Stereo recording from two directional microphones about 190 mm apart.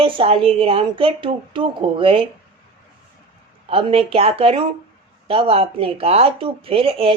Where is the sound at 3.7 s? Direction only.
30° right (ahead or behind).